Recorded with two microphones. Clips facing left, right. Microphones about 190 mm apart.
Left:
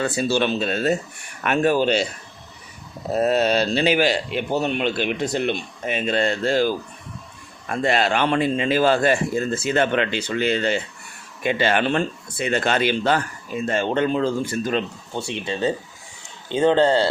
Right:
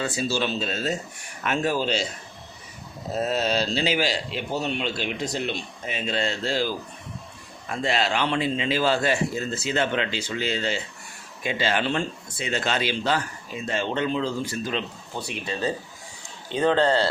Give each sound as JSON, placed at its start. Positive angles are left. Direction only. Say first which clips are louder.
{"t": 0.0, "sound": "speech", "louder": "left 5 dB", "side_deg": 60}
{"t": 3.1, "sound": "speech", "louder": "left 6 dB", "side_deg": 60}
{"t": 15.1, "sound": "speech", "louder": "left 4 dB", "side_deg": 25}